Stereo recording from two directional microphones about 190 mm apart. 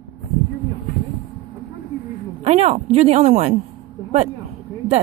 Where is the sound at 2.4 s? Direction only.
35° right (ahead or behind).